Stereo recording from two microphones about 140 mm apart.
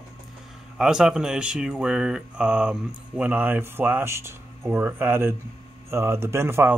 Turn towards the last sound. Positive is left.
turn(degrees=-20)  # may be behind; listen again after turning